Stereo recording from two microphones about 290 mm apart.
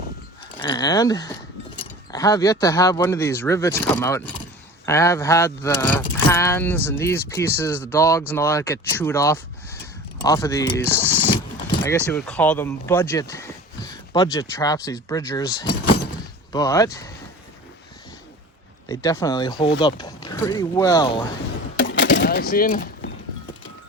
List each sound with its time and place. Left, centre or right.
0.5 s speech: centre
18.9 s speech: centre
21.8 s a sound: left